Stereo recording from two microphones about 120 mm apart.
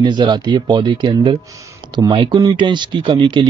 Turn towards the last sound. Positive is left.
turn(degrees=-45)  # may be behind; listen again after turning